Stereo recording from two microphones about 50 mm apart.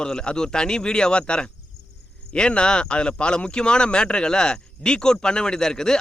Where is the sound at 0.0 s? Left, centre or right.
Centre.